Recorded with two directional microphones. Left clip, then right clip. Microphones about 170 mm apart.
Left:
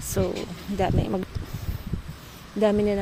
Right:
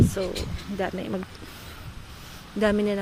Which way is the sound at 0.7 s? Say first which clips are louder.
Left 4 dB; 20° left (ahead or behind).